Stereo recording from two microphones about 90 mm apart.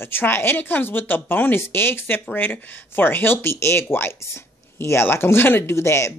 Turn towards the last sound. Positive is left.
turn(degrees=30)  # may be behind; listen again after turning